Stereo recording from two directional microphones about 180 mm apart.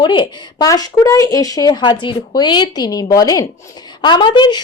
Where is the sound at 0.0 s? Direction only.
25° left (ahead or behind).